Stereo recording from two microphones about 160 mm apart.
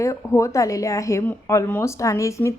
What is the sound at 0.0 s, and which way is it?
A woman's voice, 20° left (ahead or behind).